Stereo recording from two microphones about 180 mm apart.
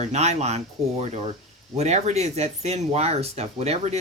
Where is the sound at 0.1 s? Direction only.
40° right (ahead or behind).